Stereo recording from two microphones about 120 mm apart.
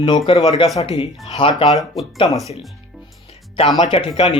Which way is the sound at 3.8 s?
45° left (ahead or behind).